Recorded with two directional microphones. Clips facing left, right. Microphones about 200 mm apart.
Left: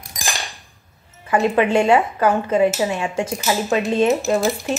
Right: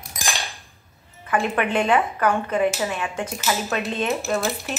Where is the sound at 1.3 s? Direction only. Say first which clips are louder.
Left 6 dB; 25° left (ahead or behind).